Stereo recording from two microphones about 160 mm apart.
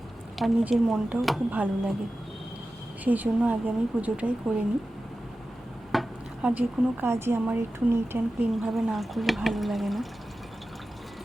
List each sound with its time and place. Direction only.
0.3 s speech: centre (ahead or behind)
3.0 s speech: 10° right (ahead or behind)
5.9 s a sound: centre (ahead or behind)
6.5 s speech: 10° right (ahead or behind)
8.6 s speech: centre (ahead or behind)